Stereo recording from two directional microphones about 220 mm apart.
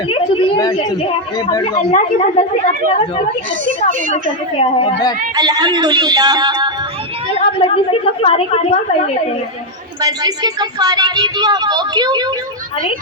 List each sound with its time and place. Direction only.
0.1 s a woman's voice: 25° left (ahead or behind)
4.1 s a woman's voice: 25° left (ahead or behind)
5.3 s speech: 20° right (ahead or behind)
7.3 s a woman's voice: 25° left (ahead or behind)
10.0 s speech: 15° right (ahead or behind)